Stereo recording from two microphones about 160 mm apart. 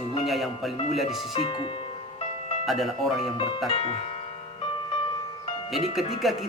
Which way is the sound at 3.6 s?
35° left (ahead or behind).